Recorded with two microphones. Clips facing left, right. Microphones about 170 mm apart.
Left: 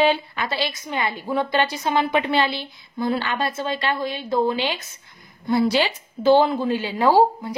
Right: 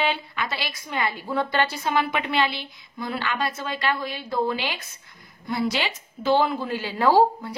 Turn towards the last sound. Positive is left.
turn(degrees=15)  # may be behind; listen again after turning